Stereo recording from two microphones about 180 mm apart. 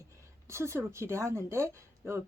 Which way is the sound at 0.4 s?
15° right (ahead or behind).